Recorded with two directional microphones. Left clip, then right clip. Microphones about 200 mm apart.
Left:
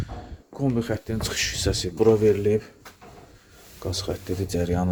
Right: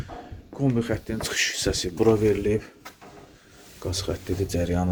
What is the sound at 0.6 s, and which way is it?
Speech, 15° left (ahead or behind).